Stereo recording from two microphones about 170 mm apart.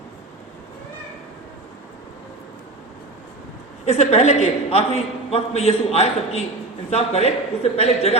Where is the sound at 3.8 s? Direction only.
40° left (ahead or behind).